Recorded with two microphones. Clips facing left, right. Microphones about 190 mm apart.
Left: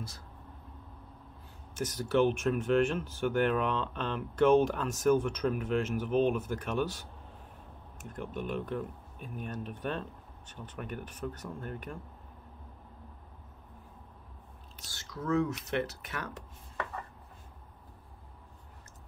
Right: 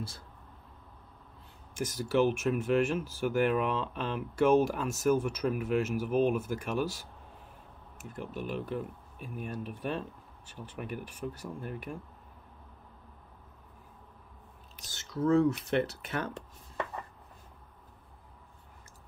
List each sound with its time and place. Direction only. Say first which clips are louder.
1.8 s speech: even; 10° right (ahead or behind)
14.9 s speech: right 5 dB; 25° right (ahead or behind)